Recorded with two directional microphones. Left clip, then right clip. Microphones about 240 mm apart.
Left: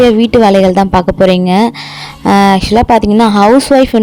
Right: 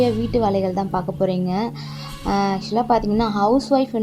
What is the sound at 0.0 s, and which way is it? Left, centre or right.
Speech, left.